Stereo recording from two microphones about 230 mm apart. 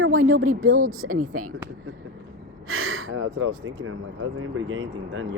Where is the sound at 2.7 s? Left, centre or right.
Right.